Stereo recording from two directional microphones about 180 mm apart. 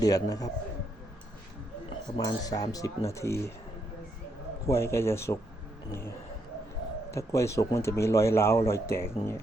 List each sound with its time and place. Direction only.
0.0 s speech: 20° left (ahead or behind)
2.1 s speech: 20° left (ahead or behind)
4.6 s speech: 15° left (ahead or behind)